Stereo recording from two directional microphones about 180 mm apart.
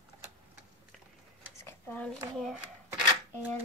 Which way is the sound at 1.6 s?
10° left (ahead or behind).